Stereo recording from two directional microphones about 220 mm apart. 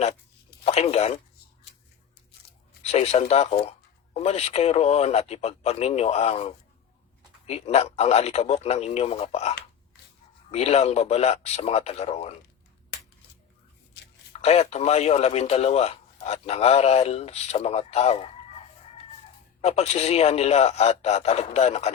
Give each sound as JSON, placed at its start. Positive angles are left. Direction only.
{"t": 0.6, "sound": "speech", "side_deg": 30}
{"t": 2.8, "sound": "speech", "side_deg": 30}
{"t": 14.3, "sound": "speech", "side_deg": 30}
{"t": 19.6, "sound": "speech", "side_deg": 30}